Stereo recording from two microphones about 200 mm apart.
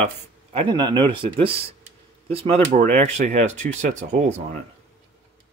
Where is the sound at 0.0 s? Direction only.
30° right (ahead or behind).